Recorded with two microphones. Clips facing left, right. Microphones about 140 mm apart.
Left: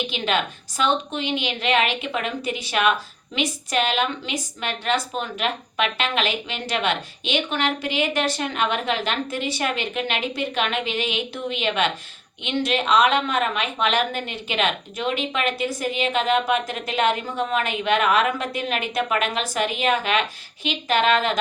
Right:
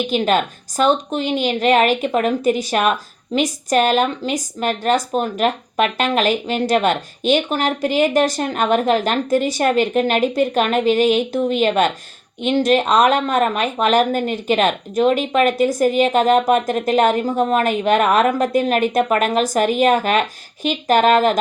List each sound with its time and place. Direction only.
0.1 s a woman's voice: 45° right (ahead or behind)